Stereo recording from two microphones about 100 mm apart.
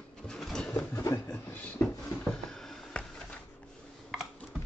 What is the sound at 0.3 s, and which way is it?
Bird, 5° left (ahead or behind).